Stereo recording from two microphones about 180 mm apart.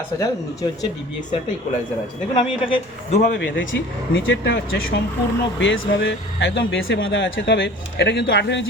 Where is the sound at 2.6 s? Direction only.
30° left (ahead or behind).